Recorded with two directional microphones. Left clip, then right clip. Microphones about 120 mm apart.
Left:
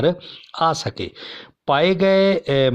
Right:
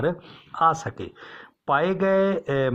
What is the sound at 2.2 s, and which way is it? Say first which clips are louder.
Speech: left 6 dB; 30° left (ahead or behind).